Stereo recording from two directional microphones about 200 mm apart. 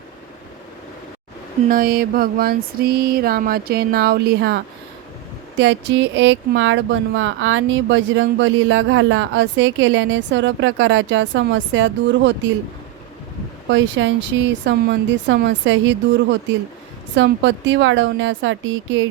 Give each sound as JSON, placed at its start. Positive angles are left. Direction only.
{"t": 1.7, "sound": "a sound", "side_deg": -45}
{"t": 5.5, "sound": "speech", "side_deg": -65}
{"t": 13.7, "sound": "speech", "side_deg": -65}